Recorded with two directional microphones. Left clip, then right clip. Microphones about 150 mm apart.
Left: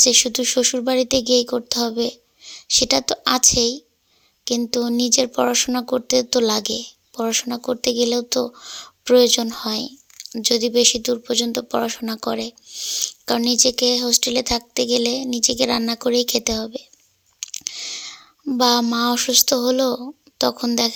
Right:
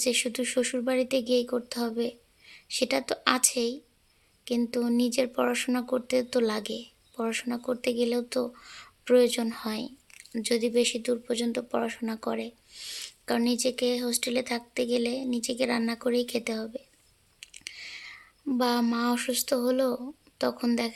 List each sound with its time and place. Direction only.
0.0 s speech: 30° left (ahead or behind)
12.6 s speech: 20° left (ahead or behind)
13.2 s speech: 35° left (ahead or behind)
17.4 s clicking: 35° left (ahead or behind)
18.5 s speech: 35° left (ahead or behind)